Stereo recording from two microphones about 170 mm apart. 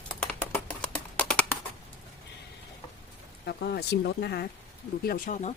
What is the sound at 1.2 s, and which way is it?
Computer keyboard, 10° left (ahead or behind).